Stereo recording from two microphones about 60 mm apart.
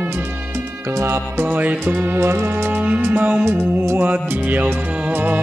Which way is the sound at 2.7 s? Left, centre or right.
Right.